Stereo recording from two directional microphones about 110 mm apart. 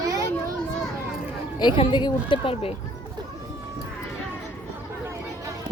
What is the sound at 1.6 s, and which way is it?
Speech, 45° left (ahead or behind).